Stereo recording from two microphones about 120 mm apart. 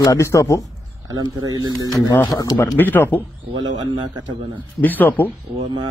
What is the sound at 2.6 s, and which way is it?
Speech, 15° left (ahead or behind).